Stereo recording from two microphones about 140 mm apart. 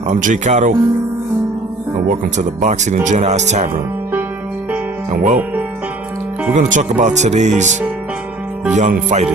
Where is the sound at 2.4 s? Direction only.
55° right (ahead or behind).